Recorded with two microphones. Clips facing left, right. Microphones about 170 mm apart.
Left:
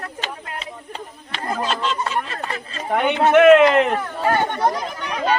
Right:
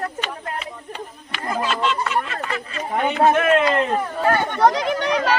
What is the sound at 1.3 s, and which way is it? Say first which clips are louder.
Speech: even; 35° left (ahead or behind).